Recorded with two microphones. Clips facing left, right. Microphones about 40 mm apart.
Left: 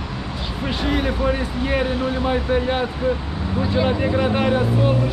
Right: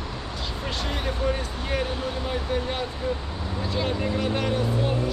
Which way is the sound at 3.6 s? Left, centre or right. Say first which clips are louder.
Left 8 dB; left.